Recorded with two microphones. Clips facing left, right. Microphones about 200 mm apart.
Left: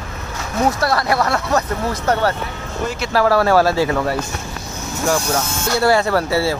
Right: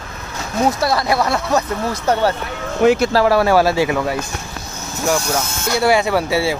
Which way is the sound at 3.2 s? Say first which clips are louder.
Left 1 dB; 20° right (ahead or behind).